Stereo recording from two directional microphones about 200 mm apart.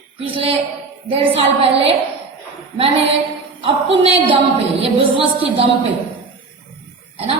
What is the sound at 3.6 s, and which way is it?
A woman's voice, 30° right (ahead or behind).